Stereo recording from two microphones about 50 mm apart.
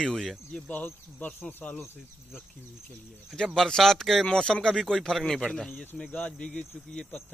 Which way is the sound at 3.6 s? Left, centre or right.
Centre.